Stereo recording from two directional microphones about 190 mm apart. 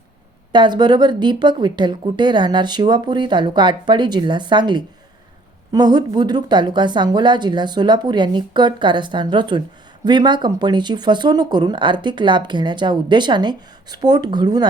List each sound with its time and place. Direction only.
0.5 s speech: 25° right (ahead or behind)